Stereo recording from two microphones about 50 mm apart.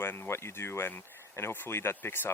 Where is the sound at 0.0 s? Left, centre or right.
Left.